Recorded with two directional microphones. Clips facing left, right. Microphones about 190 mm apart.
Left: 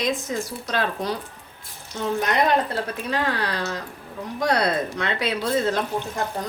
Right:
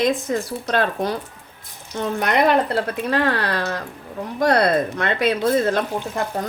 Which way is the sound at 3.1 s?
60° right (ahead or behind).